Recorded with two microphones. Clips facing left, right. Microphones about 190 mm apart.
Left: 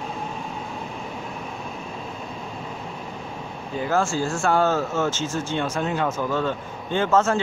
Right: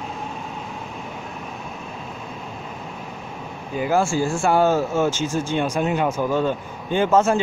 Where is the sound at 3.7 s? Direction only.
10° right (ahead or behind).